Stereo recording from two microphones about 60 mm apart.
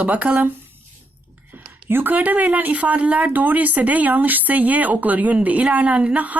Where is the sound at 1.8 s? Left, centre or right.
Right.